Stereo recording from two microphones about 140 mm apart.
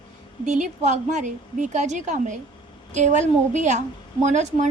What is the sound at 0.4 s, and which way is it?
A woman's voice, 60° right (ahead or behind).